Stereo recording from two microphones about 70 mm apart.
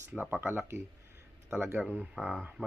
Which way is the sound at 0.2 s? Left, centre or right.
Right.